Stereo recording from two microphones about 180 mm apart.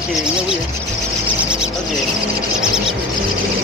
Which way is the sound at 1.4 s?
5° right (ahead or behind).